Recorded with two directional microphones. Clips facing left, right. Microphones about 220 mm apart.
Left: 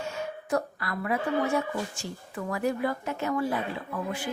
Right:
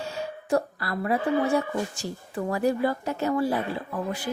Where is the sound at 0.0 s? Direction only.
35° right (ahead or behind).